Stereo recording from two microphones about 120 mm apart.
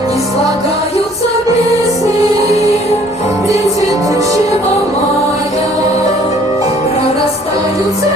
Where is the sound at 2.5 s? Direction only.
65° left (ahead or behind).